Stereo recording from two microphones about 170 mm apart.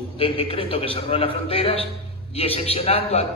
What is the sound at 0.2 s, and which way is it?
A man's voice, 30° left (ahead or behind).